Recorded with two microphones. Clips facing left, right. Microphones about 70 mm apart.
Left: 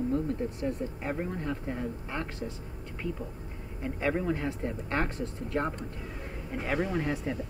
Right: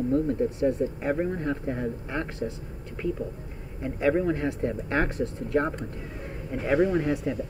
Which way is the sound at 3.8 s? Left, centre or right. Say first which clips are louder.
Right 6 dB; centre.